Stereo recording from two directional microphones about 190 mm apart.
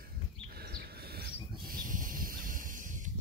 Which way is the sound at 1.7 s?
45° right (ahead or behind).